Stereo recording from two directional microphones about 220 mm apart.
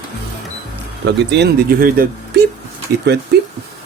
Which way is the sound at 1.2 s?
50° right (ahead or behind).